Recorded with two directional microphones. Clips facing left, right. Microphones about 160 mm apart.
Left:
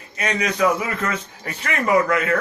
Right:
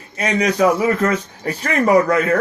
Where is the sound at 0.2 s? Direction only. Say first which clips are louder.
Right 4 dB; 35° right (ahead or behind).